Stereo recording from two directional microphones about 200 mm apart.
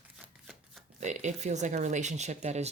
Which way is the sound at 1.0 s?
35° right (ahead or behind).